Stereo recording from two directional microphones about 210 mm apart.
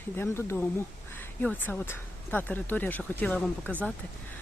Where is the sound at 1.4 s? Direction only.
5° left (ahead or behind).